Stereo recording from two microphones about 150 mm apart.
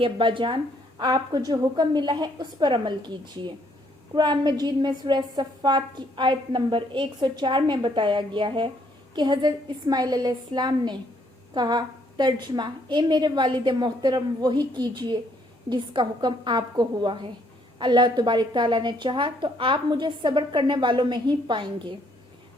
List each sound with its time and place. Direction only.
0.0 s a woman's voice: 35° right (ahead or behind)